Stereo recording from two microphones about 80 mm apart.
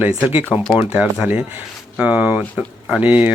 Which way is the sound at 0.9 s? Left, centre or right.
Centre.